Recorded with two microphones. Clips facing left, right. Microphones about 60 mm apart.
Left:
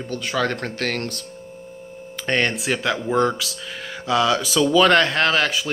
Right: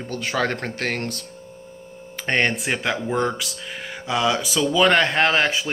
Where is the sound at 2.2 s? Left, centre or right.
Right.